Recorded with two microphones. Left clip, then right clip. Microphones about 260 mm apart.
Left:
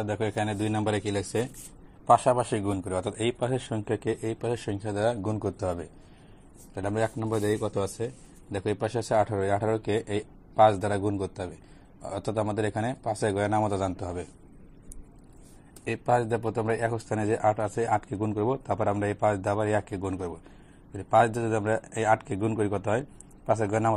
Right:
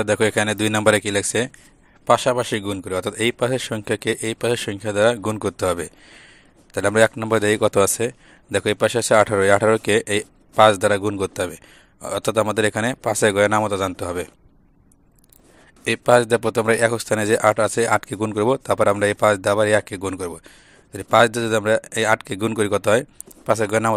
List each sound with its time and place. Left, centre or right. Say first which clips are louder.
0.0 s speech: right 11 dB; right
6.7 s speech: right 12 dB; right
15.8 s speech: right 10 dB; right